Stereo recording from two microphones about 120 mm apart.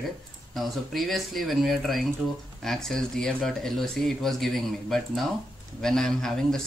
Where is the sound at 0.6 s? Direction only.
Centre (ahead or behind).